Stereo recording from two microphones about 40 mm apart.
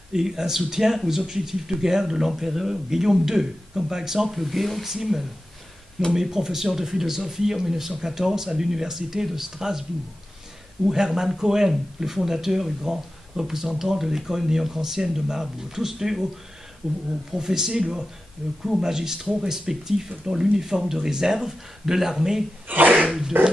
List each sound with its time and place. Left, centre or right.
0.1 s speech: centre
4.8 s speech: centre
10.9 s speech: centre
17.4 s speech: centre
22.7 s speech: right
23.3 s dog: right